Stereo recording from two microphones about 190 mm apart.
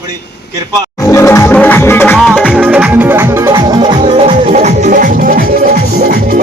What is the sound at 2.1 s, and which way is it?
Music, centre (ahead or behind).